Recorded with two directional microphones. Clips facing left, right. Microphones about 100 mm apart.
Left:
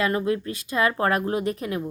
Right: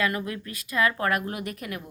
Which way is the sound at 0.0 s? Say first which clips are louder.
Left 5 dB; 25° left (ahead or behind).